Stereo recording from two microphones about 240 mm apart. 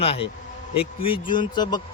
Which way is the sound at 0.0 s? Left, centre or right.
Left.